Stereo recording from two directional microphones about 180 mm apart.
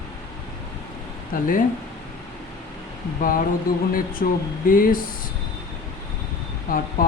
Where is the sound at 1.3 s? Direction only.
50° left (ahead or behind).